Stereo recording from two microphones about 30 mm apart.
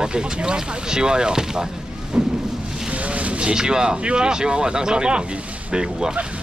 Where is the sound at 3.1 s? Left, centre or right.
Right.